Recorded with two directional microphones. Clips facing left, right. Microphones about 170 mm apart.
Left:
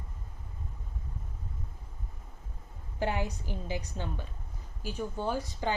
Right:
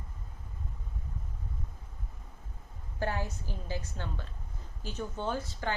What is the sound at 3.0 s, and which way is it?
A woman's voice, 15° left (ahead or behind).